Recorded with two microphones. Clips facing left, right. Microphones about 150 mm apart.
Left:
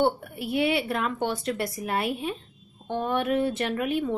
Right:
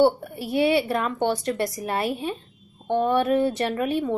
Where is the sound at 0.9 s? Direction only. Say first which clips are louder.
Right 4 dB; centre (ahead or behind).